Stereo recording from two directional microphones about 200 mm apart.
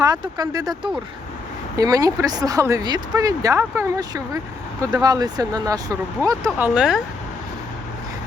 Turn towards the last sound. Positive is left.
turn(degrees=-5)  # may be behind; listen again after turning